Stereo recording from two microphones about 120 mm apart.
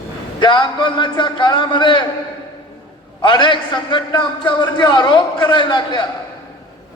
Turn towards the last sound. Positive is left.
turn(degrees=40)  # may be behind; listen again after turning